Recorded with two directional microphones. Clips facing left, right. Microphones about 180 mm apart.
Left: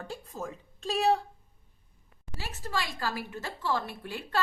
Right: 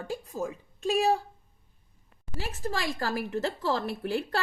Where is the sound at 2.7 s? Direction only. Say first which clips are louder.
Right 1 dB; 40° right (ahead or behind).